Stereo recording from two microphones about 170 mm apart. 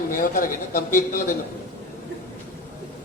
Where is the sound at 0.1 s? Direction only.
55° left (ahead or behind).